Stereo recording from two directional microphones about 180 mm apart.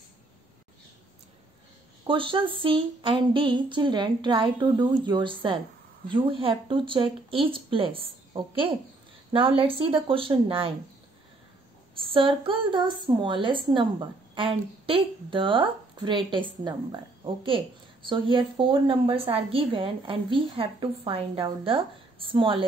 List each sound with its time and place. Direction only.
2.0 s a woman's voice: 30° right (ahead or behind)
11.9 s a woman's voice: 30° right (ahead or behind)
18.0 s a woman's voice: 30° right (ahead or behind)